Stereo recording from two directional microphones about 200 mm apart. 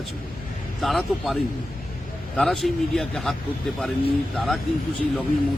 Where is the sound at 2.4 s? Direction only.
Centre (ahead or behind).